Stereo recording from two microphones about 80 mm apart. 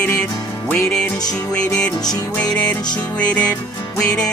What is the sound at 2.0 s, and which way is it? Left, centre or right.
Music, left.